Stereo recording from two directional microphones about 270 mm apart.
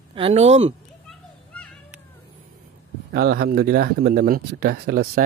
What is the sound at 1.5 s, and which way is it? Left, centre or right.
Music, centre.